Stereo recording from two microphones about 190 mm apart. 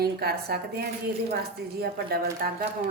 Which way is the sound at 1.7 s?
55° right (ahead or behind).